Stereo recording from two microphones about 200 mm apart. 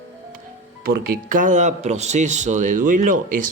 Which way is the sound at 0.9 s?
45° right (ahead or behind).